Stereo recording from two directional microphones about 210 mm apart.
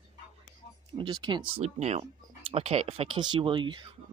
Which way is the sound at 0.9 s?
20° right (ahead or behind).